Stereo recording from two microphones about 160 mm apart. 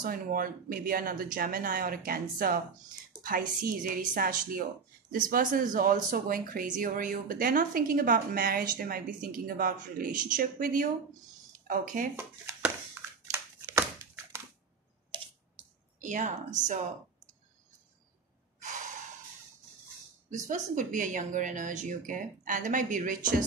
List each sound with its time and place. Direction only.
0.0 s speech: 60° right (ahead or behind)
12.2 s a sound: 15° right (ahead or behind)
16.0 s a woman's voice: 50° right (ahead or behind)
20.2 s speech: 50° right (ahead or behind)